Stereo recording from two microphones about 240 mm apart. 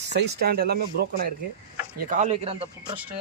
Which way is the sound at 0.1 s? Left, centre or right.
Right.